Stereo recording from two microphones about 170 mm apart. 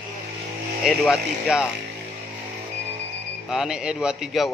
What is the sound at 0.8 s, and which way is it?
Speech, centre (ahead or behind).